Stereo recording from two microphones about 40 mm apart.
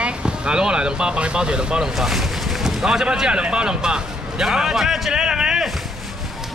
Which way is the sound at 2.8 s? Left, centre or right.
Centre.